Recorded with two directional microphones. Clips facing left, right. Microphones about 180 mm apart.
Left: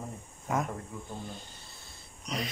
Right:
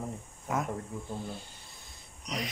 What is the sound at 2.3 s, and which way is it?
Speech, 15° right (ahead or behind).